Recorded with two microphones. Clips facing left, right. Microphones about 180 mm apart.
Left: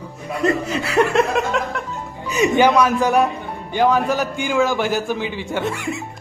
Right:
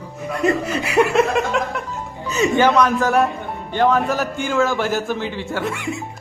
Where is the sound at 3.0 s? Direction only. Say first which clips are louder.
Even; centre (ahead or behind).